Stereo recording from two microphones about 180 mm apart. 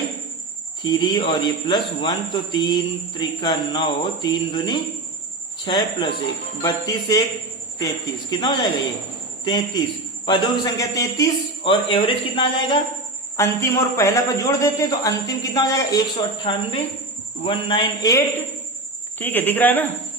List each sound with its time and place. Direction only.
0.9 s a man's voice: 25° left (ahead or behind)
13.3 s a man's voice: 15° left (ahead or behind)